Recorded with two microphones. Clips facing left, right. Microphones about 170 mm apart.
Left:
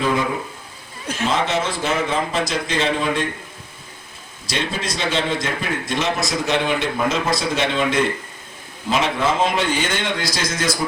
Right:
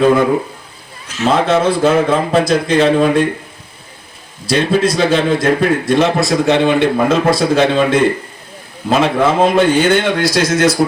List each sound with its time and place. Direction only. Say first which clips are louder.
0.0 s a man's voice: right 10 dB; 60° right (ahead or behind)
4.4 s a man's voice: right 12 dB; 60° right (ahead or behind)